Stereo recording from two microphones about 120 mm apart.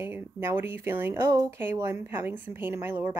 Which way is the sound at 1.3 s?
30° right (ahead or behind).